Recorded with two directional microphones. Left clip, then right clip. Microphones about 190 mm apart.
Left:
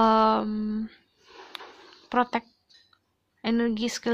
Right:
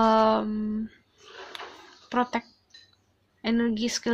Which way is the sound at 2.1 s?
35° left (ahead or behind).